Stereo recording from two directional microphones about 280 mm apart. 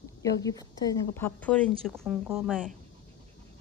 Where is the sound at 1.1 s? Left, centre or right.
Centre.